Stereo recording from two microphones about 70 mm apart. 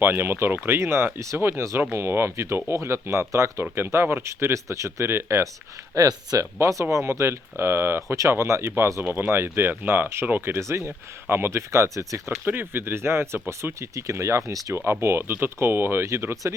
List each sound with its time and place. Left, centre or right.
0.0 s speech: right
5.9 s speech: right
10.6 s speech: right
12.5 s speech: right
14.8 s speech: right